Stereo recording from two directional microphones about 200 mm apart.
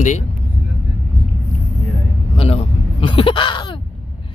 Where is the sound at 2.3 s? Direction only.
25° left (ahead or behind).